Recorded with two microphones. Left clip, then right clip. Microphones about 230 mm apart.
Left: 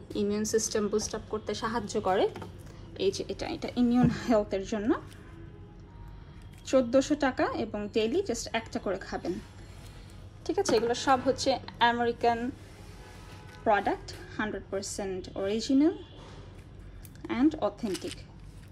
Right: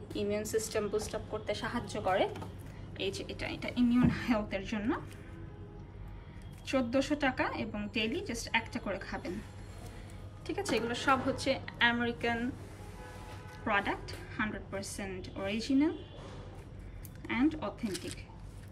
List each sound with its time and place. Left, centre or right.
0.1 s speech: left
3.0 s speech: left
6.6 s a woman's voice: centre
10.6 s a woman's voice: centre
13.7 s a woman's voice: centre
17.3 s a woman's voice: centre
17.9 s speech: centre